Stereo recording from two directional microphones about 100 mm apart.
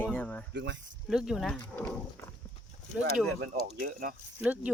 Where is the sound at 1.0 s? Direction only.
5° right (ahead or behind).